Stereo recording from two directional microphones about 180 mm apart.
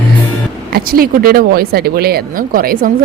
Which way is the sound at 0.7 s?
55° right (ahead or behind).